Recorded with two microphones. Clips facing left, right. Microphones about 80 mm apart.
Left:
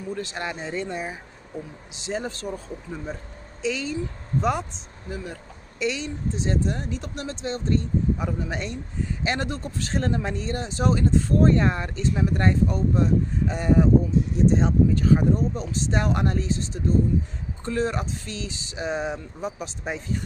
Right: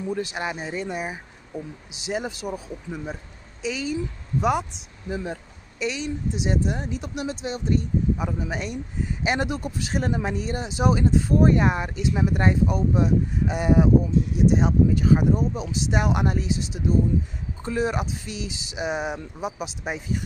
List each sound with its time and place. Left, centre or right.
0.1 s speech: centre
5.1 s speech: right
5.8 s speech: centre